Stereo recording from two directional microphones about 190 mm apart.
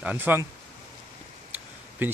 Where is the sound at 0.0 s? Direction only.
10° right (ahead or behind).